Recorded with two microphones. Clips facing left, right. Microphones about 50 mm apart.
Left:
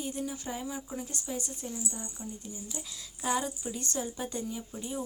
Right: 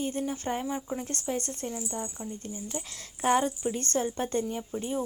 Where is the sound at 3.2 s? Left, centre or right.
Right.